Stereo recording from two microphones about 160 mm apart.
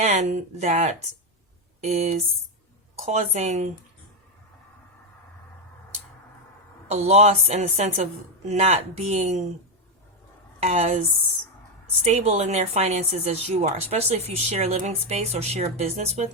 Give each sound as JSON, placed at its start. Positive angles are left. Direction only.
{"t": 0.0, "sound": "a woman's voice", "side_deg": -45}
{"t": 6.8, "sound": "a woman's voice", "side_deg": -40}
{"t": 10.6, "sound": "a woman's voice", "side_deg": -45}
{"t": 12.0, "sound": "a woman's voice", "side_deg": -45}